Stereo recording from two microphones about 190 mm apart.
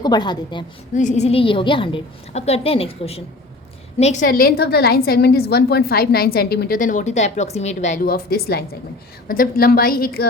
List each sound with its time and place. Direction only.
0.0 s a woman's voice: 20° left (ahead or behind)
0.9 s a woman's voice: 40° left (ahead or behind)
8.0 s a woman's voice: 55° left (ahead or behind)